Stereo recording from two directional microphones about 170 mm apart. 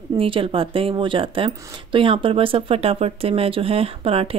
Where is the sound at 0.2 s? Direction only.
30° right (ahead or behind).